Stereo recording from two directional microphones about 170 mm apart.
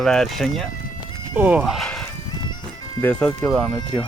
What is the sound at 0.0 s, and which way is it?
Speech, centre (ahead or behind).